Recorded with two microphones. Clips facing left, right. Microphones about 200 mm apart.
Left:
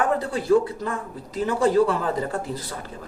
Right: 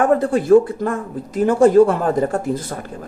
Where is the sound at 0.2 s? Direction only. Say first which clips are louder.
Right 7 dB; 50° right (ahead or behind).